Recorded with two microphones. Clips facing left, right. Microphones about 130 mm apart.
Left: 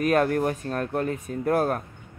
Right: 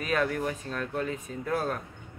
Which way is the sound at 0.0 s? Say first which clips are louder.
Left 7 dB; 50° left (ahead or behind).